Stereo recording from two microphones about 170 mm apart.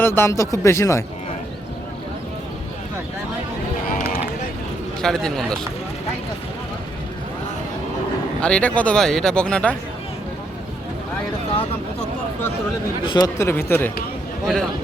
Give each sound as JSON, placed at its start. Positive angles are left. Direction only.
{"t": 0.0, "sound": "speech", "side_deg": 15}
{"t": 3.8, "sound": "run", "side_deg": 50}
{"t": 5.0, "sound": "speech", "side_deg": 0}
{"t": 8.4, "sound": "speech", "side_deg": 5}
{"t": 13.1, "sound": "speech", "side_deg": 20}